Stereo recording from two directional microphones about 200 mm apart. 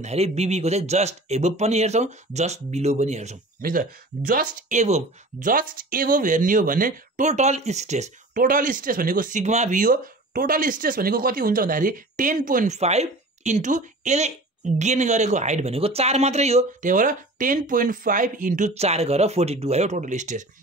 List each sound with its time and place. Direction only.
0.0 s speech: 35° right (ahead or behind)